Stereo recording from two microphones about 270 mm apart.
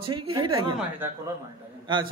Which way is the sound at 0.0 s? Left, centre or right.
Centre.